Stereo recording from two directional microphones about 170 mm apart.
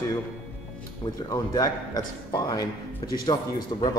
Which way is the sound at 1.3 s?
20° left (ahead or behind).